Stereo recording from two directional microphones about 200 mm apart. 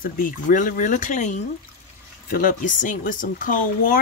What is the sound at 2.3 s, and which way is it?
Speech, 40° left (ahead or behind).